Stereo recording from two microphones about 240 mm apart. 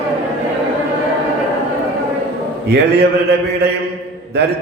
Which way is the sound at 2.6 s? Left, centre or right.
Right.